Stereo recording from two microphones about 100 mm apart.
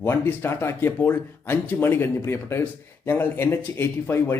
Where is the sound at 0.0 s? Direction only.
20° left (ahead or behind).